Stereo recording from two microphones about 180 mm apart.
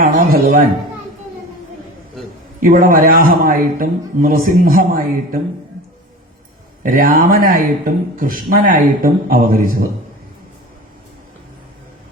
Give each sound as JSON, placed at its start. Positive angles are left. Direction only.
{"t": 0.0, "sound": "speech", "side_deg": -55}
{"t": 2.6, "sound": "a man's voice", "side_deg": -50}
{"t": 6.8, "sound": "a man's voice", "side_deg": -55}